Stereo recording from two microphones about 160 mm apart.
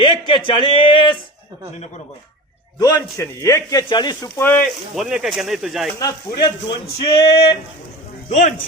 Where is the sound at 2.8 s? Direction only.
20° left (ahead or behind).